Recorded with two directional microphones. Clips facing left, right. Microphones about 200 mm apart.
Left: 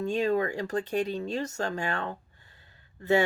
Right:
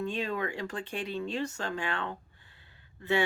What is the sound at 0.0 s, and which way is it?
Speech, 40° left (ahead or behind).